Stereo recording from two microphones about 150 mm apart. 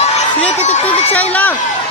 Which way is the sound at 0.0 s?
50° left (ahead or behind).